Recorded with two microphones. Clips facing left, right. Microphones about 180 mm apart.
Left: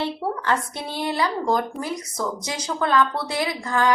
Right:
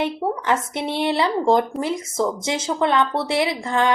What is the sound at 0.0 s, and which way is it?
A woman's voice, 20° right (ahead or behind).